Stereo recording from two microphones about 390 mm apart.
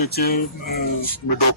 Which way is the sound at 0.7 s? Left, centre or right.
Left.